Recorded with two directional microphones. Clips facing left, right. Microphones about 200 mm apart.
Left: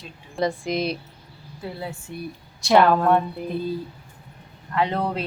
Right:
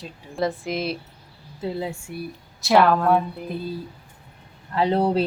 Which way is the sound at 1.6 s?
15° right (ahead or behind).